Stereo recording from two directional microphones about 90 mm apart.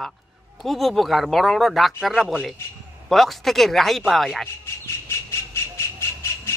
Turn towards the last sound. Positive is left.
turn(degrees=30)  # may be behind; listen again after turning